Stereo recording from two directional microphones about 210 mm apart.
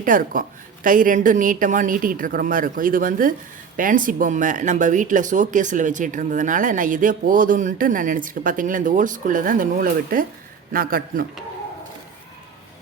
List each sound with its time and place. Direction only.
0.0 s a man's voice: 40° right (ahead or behind)